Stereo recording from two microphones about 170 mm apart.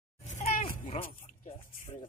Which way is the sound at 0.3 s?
50° left (ahead or behind).